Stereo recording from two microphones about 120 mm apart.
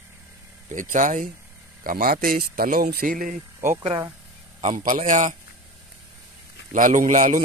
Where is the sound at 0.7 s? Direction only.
90° right.